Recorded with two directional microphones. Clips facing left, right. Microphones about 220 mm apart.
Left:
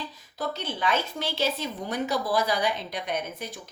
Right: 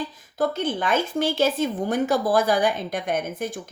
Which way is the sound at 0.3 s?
50° right (ahead or behind).